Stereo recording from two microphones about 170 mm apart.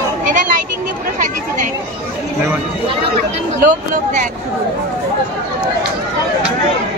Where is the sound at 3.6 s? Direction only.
50° right (ahead or behind).